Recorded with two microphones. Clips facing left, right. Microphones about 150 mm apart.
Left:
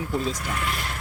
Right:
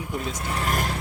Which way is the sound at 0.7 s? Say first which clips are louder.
Right 5 dB; 45° right (ahead or behind).